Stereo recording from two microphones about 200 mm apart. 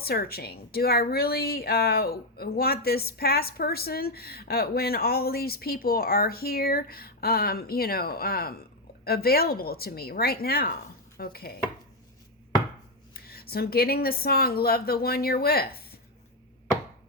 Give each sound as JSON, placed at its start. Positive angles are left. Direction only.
{"t": 0.0, "sound": "a woman's voice", "side_deg": 50}
{"t": 13.1, "sound": "a woman's voice", "side_deg": 50}